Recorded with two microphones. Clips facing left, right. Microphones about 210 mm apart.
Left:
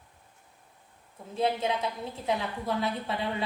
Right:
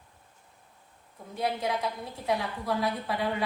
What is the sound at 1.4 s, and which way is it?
A woman's voice, 25° left (ahead or behind).